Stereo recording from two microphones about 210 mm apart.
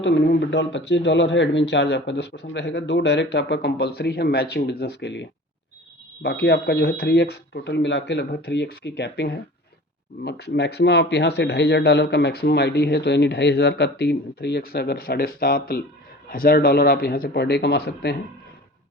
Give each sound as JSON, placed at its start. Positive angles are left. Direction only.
{"t": 0.0, "sound": "speech", "side_deg": 55}